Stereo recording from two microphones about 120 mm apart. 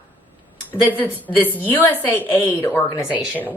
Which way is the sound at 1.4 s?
15° right (ahead or behind).